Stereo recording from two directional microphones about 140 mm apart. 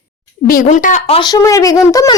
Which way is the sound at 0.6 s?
60° left (ahead or behind).